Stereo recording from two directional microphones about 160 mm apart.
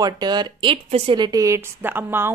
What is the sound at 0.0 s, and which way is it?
A woman's voice, 25° right (ahead or behind).